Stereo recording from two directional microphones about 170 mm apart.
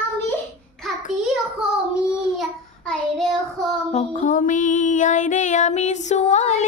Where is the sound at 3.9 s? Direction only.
45° left (ahead or behind).